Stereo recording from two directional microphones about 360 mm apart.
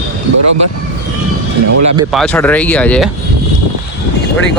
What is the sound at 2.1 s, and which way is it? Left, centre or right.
Speech, centre.